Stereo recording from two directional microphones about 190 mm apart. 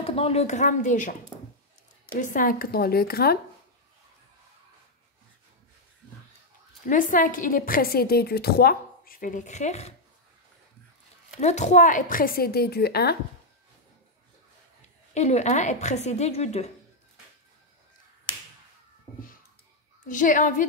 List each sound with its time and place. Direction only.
0.0 s a woman's voice: 30° left (ahead or behind)
2.1 s a woman's voice: 45° left (ahead or behind)
6.9 s a woman's voice: 45° left (ahead or behind)
11.4 s a woman's voice: 40° left (ahead or behind); by 13.2 s 55° left (ahead or behind)
15.1 s a woman's voice: 35° left (ahead or behind)
20.1 s a woman's voice: 45° left (ahead or behind)